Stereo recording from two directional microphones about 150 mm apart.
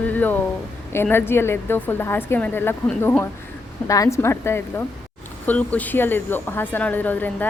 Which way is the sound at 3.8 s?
20° left (ahead or behind).